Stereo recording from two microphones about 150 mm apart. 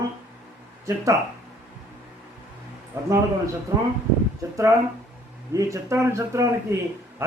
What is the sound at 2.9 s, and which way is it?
Speech, 15° right (ahead or behind).